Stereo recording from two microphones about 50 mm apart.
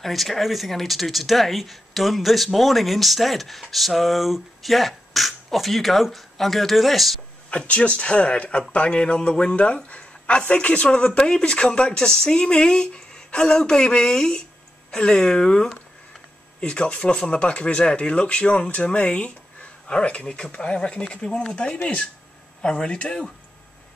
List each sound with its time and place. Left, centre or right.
0.0 s speech: centre
7.4 s speech: left
22.6 s speech: centre